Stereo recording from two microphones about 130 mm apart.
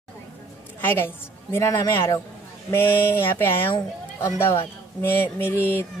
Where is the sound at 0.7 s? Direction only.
15° left (ahead or behind).